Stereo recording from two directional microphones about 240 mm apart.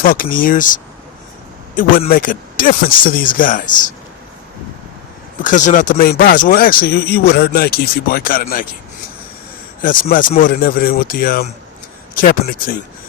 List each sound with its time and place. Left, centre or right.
0.0 s speech: left
1.7 s speech: left
5.4 s speech: left
9.8 s speech: left